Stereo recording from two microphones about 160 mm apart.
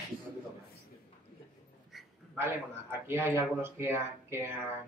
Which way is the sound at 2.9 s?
15° right (ahead or behind).